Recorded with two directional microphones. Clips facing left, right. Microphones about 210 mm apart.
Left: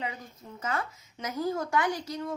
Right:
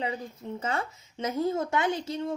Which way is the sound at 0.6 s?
25° right (ahead or behind).